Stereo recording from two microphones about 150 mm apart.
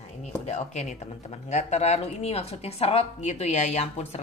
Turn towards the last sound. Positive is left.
turn(degrees=45)  # may be behind; listen again after turning